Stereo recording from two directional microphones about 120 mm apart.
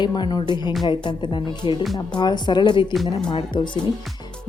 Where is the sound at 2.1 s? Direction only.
40° left (ahead or behind).